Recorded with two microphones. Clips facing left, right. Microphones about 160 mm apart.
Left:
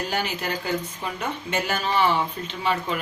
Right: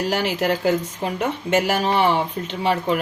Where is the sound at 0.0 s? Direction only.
85° right.